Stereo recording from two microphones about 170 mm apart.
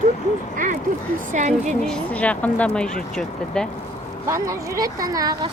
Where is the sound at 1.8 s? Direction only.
5° left (ahead or behind).